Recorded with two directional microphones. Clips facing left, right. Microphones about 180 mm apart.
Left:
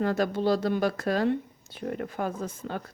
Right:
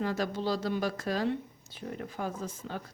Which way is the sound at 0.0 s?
55° left (ahead or behind).